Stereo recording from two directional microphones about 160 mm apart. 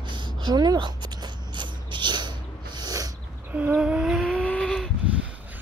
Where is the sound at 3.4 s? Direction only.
10° right (ahead or behind).